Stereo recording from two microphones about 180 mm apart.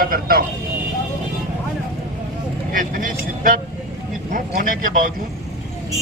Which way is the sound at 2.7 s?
50° right (ahead or behind).